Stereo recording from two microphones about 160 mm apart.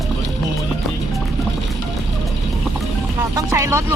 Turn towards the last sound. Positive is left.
turn(degrees=-20)  # may be behind; listen again after turning